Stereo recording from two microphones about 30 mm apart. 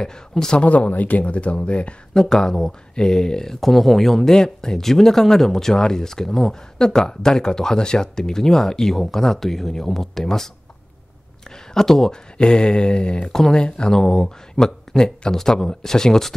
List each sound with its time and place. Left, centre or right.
0.6 s speech: left
0.9 s speech: left
2.1 s speech: left
3.6 s speech: centre
4.3 s speech: left
11.7 s speech: centre
12.1 s speech: left
13.3 s speech: centre
13.6 s speech: left
13.9 s speech: centre